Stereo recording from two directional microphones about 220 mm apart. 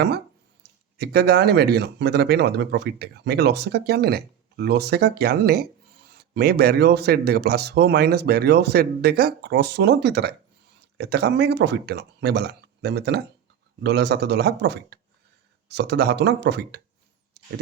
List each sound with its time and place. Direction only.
0.9 s speech: 45° right (ahead or behind)